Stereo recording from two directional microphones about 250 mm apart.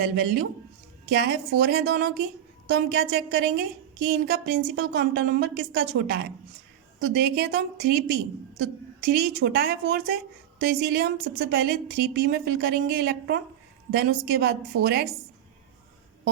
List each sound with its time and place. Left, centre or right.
0.0 s a woman's voice: right